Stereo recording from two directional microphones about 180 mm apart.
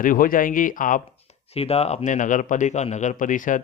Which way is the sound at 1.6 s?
35° left (ahead or behind).